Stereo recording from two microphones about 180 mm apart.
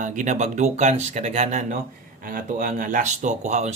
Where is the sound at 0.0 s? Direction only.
45° right (ahead or behind).